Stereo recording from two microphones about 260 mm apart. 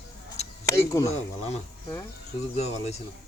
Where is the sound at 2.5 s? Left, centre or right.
Left.